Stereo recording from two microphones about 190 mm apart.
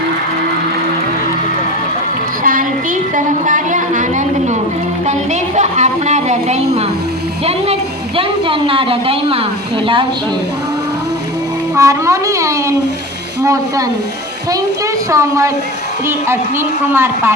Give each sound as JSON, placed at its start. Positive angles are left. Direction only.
{"t": 2.4, "sound": "a sound", "side_deg": -45}
{"t": 5.0, "sound": "a woman's voice", "side_deg": -40}
{"t": 11.7, "sound": "speech", "side_deg": -15}
{"t": 15.1, "sound": "speech", "side_deg": -15}
{"t": 16.9, "sound": "speech", "side_deg": -10}